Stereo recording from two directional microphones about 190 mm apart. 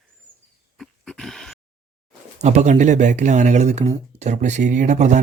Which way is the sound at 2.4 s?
35° right (ahead or behind).